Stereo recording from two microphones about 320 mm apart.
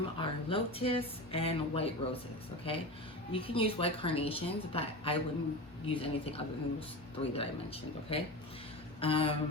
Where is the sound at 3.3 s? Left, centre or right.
Centre.